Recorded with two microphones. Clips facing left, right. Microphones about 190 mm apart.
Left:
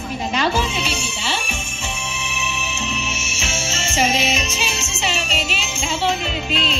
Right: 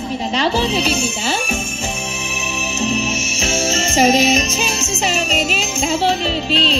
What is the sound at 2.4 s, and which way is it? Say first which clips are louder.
Music: right 7 dB; 40° right (ahead or behind).